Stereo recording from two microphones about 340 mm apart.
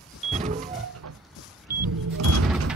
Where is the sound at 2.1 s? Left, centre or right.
Right.